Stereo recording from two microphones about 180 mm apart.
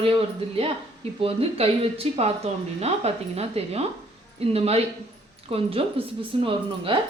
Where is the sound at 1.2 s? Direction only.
30° right (ahead or behind).